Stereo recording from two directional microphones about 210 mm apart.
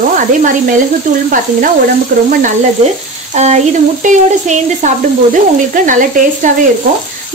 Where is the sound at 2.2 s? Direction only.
35° right (ahead or behind).